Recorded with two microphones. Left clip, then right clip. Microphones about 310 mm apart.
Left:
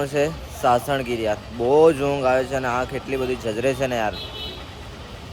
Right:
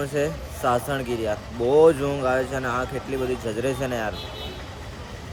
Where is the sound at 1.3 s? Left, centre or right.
Left.